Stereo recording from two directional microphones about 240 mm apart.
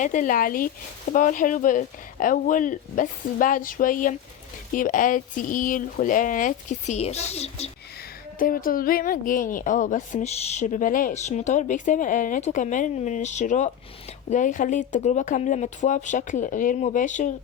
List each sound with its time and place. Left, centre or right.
0.0 s a woman's voice: left